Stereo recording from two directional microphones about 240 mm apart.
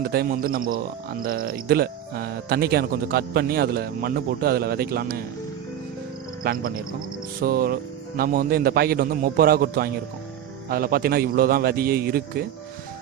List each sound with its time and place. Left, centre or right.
0.1 s speech: right
6.4 s speech: right